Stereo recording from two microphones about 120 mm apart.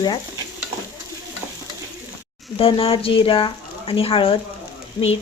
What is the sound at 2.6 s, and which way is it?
Speech, 50° left (ahead or behind).